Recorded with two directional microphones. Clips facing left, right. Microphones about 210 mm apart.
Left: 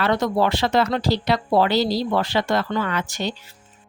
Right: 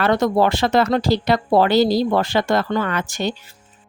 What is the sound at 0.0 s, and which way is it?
A woman's voice, 50° right (ahead or behind).